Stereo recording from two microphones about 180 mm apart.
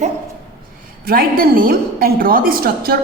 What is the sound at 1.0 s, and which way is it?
A woman's voice, 55° right (ahead or behind).